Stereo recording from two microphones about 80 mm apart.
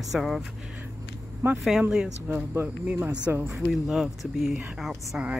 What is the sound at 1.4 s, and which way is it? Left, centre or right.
Speech, right.